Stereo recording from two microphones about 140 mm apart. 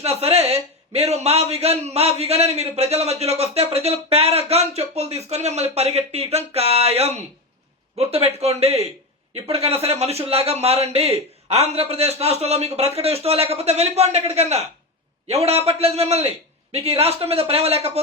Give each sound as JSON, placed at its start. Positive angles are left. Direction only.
{"t": 0.0, "sound": "a man's voice", "side_deg": -45}